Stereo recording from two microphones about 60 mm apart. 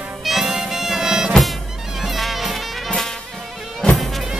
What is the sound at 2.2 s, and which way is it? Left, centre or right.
Music, centre.